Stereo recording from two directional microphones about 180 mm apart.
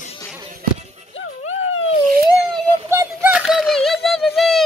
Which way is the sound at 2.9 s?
10° right (ahead or behind).